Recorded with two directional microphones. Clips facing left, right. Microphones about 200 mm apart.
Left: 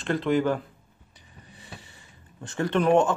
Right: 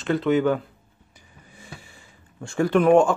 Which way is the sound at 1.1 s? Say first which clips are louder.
Even; 10° right (ahead or behind).